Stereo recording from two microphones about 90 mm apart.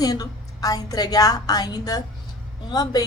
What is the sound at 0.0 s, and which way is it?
A woman's voice, 45° left (ahead or behind).